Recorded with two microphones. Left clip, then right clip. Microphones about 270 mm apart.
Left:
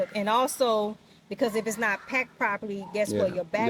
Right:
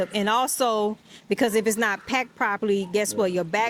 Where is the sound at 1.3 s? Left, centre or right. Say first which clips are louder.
Right 6 dB; right.